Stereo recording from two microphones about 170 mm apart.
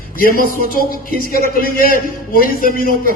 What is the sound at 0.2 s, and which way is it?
Speech, 60° left (ahead or behind).